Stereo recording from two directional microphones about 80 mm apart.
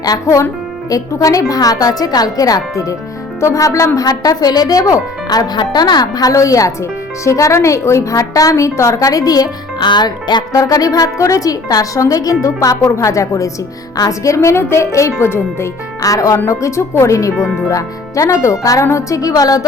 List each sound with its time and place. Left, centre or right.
0.0 s a woman's voice: left
5.5 s a woman's voice: left
10.5 s a woman's voice: left
16.0 s a woman's voice: left
17.3 s speech: centre
17.7 s a woman's voice: left